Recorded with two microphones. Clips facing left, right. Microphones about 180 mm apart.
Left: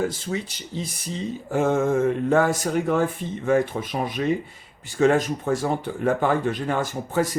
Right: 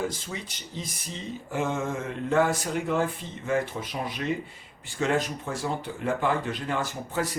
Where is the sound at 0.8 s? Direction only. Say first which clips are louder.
Left 7 dB; 40° left (ahead or behind).